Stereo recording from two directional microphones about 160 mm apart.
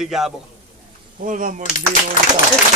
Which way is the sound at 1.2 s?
55° right (ahead or behind).